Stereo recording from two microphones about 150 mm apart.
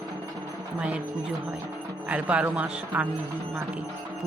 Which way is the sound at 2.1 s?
10° right (ahead or behind).